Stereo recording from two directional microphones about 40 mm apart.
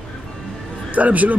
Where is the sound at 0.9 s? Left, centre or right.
Right.